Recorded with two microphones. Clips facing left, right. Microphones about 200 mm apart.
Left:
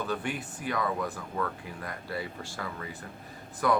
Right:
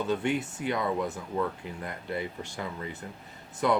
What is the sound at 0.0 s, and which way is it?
Speech, 25° right (ahead or behind).